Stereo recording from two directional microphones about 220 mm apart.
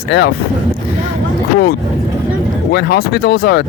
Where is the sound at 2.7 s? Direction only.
45° left (ahead or behind).